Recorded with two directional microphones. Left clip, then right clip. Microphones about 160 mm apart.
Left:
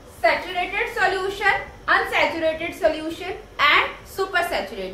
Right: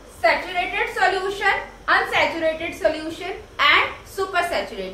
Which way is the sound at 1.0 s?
25° left (ahead or behind).